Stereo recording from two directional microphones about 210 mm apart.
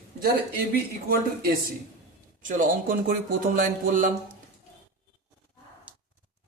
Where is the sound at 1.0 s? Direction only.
45° right (ahead or behind).